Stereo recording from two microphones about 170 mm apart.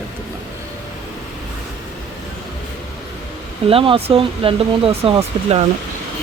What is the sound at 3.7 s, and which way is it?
Speech, 30° right (ahead or behind).